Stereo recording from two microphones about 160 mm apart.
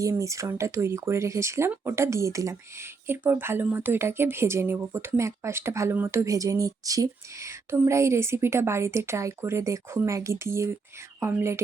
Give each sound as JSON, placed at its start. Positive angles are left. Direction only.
{"t": 0.0, "sound": "speech", "side_deg": -20}